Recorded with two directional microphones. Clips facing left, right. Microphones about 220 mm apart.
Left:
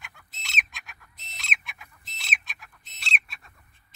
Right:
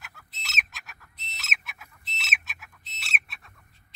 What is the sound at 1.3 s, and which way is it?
Chicken, 5° right (ahead or behind).